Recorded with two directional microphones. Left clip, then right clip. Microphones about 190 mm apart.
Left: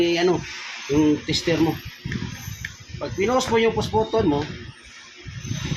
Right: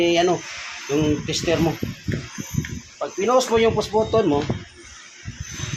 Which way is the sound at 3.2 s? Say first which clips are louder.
Right 3 dB; 30° right (ahead or behind).